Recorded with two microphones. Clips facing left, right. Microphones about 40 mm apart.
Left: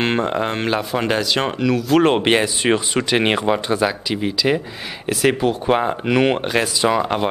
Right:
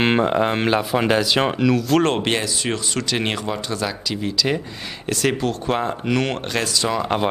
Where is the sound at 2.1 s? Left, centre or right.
Left.